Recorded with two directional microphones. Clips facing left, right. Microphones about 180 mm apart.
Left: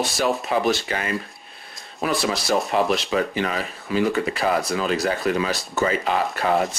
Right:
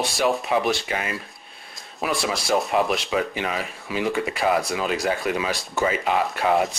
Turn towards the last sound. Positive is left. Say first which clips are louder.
# even
turn(degrees=0)  # may be behind; listen again after turning